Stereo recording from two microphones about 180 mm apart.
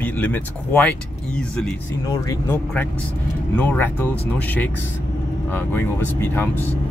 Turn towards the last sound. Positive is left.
turn(degrees=10)  # may be behind; listen again after turning